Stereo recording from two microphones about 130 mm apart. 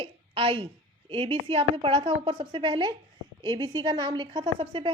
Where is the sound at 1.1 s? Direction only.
45° right (ahead or behind).